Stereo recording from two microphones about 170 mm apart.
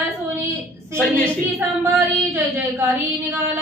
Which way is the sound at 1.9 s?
15° right (ahead or behind).